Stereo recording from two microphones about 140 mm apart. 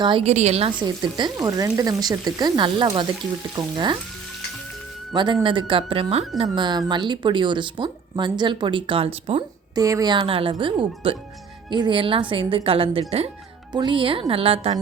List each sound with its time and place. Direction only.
0.0 s speech: 35° right (ahead or behind)
0.3 s a woman's voice: 50° right (ahead or behind)
0.8 s speech: 30° right (ahead or behind)
5.1 s speech: 35° right (ahead or behind)
6.5 s speech: 30° right (ahead or behind)
9.7 s speech: 25° right (ahead or behind); by 14.8 s 45° right (ahead or behind)